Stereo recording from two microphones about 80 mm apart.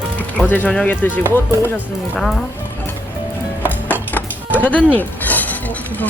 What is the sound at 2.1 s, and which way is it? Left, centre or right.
Speech, centre.